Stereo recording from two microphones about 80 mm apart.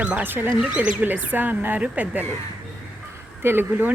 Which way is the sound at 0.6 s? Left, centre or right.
Centre.